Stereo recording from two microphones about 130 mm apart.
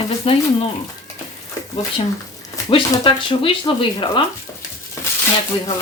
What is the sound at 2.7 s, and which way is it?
Speech, 40° left (ahead or behind).